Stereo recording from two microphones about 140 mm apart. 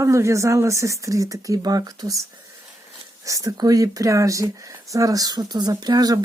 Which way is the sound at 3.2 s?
25° right (ahead or behind).